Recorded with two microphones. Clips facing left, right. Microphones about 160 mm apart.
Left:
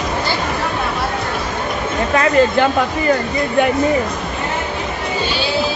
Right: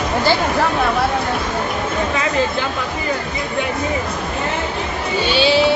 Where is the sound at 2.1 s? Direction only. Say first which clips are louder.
Left 10 dB; 60° left (ahead or behind).